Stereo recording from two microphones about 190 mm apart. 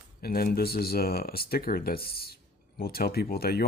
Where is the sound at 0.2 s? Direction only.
50° left (ahead or behind).